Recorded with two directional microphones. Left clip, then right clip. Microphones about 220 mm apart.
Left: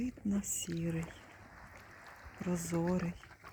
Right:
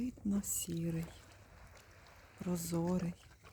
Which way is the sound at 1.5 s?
20° right (ahead or behind).